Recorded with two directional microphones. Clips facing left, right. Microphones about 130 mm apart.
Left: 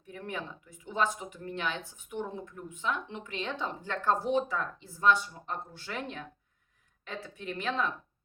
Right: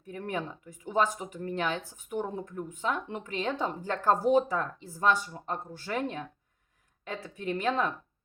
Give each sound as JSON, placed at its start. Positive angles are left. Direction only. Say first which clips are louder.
{"t": 0.1, "sound": "speech", "louder": "right 4 dB", "side_deg": -45}